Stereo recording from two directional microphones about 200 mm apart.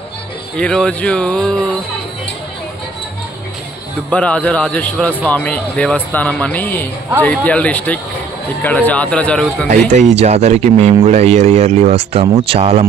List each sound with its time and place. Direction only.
0.6 s speech: 5° left (ahead or behind)
4.1 s speech: 5° left (ahead or behind)
9.7 s speech: 35° right (ahead or behind)